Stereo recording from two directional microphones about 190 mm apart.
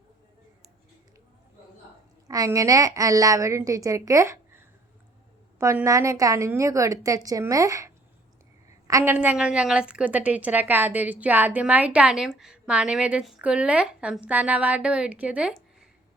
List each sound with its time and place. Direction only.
2.2 s a woman's voice: 20° right (ahead or behind)
8.9 s a woman's voice: 15° right (ahead or behind)